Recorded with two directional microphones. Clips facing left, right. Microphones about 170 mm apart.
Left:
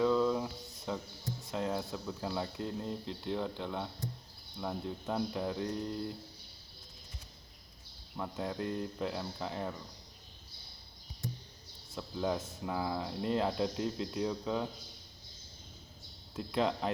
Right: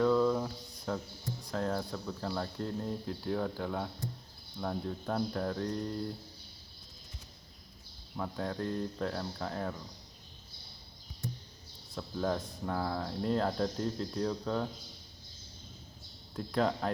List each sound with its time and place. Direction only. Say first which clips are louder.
0.0 s a sound: right 2 dB; centre (ahead or behind)
1.5 s speech: right 1 dB; centre (ahead or behind)
8.1 s speech: right 1 dB; 5° left (ahead or behind)
11.9 s speech: right 1 dB; 5° left (ahead or behind)
16.3 s speech: right 1 dB; 5° left (ahead or behind)